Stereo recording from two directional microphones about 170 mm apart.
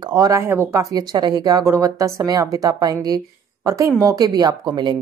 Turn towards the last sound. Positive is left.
turn(degrees=-25)  # may be behind; listen again after turning